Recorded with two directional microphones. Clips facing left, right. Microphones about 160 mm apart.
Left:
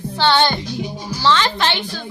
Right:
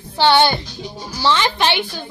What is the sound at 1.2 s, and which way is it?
Speech, 15° right (ahead or behind).